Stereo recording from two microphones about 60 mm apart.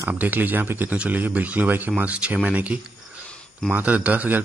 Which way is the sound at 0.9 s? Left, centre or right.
Right.